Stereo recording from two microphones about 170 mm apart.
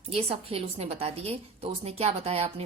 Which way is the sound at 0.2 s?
35° right (ahead or behind).